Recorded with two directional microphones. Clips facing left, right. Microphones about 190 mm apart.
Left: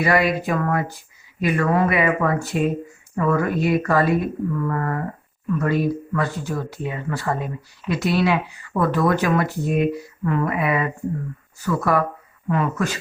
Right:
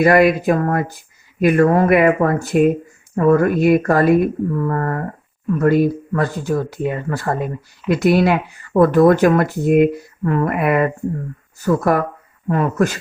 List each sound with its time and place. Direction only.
0.0 s speech: 45° right (ahead or behind)
4.5 s speech: 35° right (ahead or behind)